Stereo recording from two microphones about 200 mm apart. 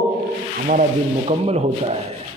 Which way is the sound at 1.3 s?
30° right (ahead or behind).